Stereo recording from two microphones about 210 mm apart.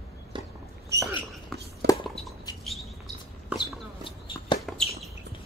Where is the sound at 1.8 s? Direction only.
50° right (ahead or behind).